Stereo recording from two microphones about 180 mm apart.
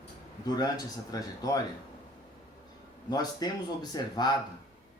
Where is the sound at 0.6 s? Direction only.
20° left (ahead or behind).